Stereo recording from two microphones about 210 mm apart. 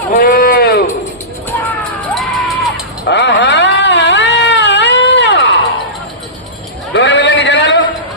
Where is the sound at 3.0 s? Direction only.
60° left (ahead or behind).